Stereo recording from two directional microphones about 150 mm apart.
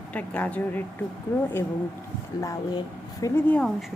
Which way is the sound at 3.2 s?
10° left (ahead or behind).